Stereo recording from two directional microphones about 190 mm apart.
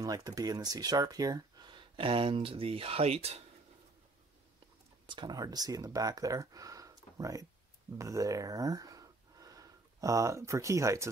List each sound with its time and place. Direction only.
0.0 s speech: 20° right (ahead or behind)
5.0 s speech: 25° right (ahead or behind)